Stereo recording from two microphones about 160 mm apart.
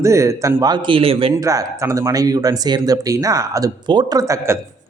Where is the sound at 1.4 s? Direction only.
20° right (ahead or behind).